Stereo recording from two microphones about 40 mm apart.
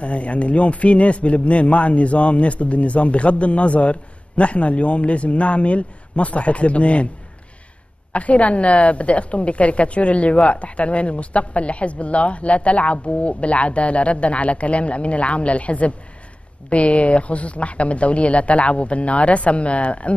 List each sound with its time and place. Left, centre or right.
0.0 s a woman's voice: left
8.1 s a woman's voice: left